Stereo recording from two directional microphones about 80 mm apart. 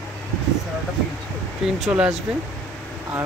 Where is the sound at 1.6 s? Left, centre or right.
Centre.